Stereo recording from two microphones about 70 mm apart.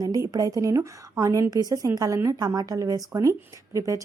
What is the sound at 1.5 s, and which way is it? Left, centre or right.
Speech, right.